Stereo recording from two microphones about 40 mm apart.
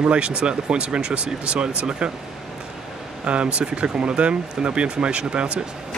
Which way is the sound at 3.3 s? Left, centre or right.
Right.